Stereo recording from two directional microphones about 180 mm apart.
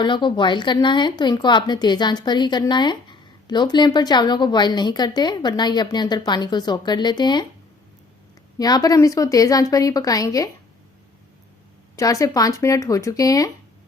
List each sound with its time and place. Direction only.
0.0 s a woman's voice: 25° left (ahead or behind)
8.5 s a woman's voice: 20° left (ahead or behind)
11.9 s speech: 20° left (ahead or behind)